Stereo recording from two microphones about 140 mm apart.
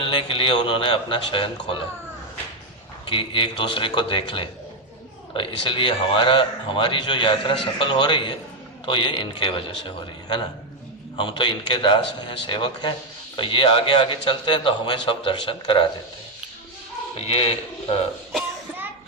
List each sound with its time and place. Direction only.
0.0 s a man's voice: 40° left (ahead or behind)
3.1 s a man's voice: 35° left (ahead or behind)
17.2 s a man's voice: 50° left (ahead or behind)